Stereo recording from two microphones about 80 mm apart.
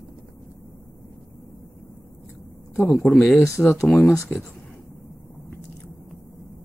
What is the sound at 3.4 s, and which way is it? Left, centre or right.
Speech, left.